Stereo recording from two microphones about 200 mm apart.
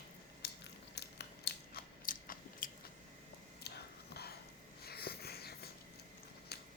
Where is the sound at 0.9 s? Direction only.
55° left (ahead or behind).